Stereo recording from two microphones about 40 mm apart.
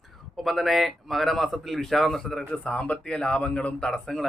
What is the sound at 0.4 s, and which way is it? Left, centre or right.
Speech, centre.